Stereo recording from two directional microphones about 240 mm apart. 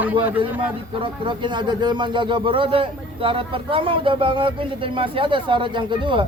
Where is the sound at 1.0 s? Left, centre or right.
Right.